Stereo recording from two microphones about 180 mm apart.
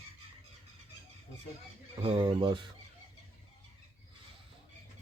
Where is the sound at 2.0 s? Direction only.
30° right (ahead or behind).